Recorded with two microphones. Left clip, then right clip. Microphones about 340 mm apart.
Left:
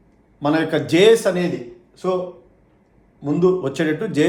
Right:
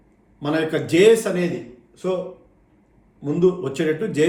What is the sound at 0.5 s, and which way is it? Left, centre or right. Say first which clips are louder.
Speech: even; centre.